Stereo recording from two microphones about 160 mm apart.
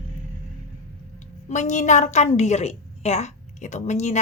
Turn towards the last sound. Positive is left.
turn(degrees=45)  # may be behind; listen again after turning